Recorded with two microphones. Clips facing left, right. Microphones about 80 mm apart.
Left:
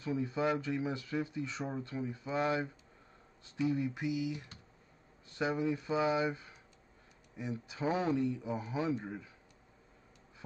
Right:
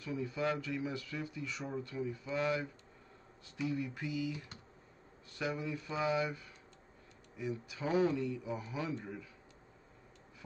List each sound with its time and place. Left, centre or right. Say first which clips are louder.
0.0 s speech: left 3 dB; left